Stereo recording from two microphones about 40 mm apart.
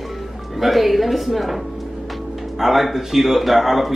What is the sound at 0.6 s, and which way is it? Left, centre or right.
Speech, centre.